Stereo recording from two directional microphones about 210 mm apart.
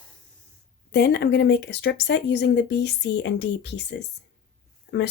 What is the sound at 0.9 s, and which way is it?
Speech, 50° left (ahead or behind).